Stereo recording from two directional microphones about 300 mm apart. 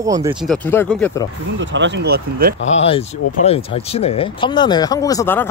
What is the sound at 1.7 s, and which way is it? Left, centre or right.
Speech, right.